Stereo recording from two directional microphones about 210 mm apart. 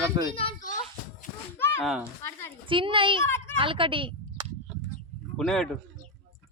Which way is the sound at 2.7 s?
25° right (ahead or behind).